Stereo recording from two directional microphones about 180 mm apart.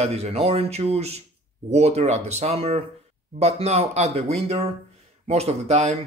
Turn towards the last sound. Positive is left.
turn(degrees=-35)  # may be behind; listen again after turning